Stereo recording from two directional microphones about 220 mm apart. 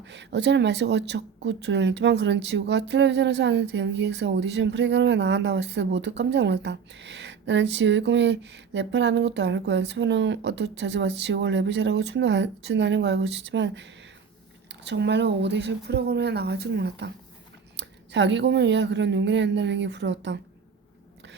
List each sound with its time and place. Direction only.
0.0 s speech: 55° right (ahead or behind)